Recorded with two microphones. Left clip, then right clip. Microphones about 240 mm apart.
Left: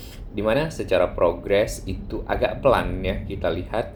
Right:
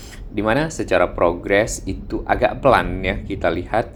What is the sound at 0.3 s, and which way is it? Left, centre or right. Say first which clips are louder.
Speech: right 3 dB; right.